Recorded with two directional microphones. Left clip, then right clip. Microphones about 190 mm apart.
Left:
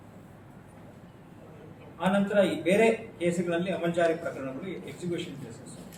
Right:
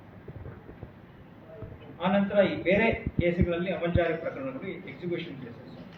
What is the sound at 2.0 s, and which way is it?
A man's voice, 20° left (ahead or behind).